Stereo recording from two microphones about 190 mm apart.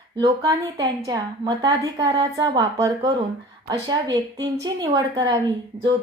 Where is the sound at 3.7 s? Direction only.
20° right (ahead or behind).